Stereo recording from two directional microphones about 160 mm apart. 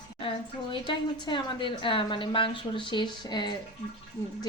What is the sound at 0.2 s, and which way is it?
A woman's voice, 35° left (ahead or behind).